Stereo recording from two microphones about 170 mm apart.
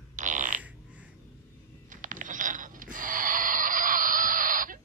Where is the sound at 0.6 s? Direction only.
10° right (ahead or behind).